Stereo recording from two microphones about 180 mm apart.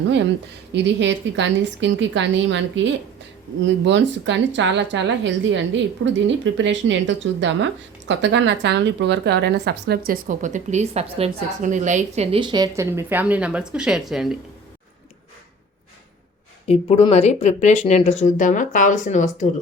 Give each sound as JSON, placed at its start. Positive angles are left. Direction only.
{"t": 0.7, "sound": "a woman's voice", "side_deg": -75}
{"t": 16.6, "sound": "speech", "side_deg": 35}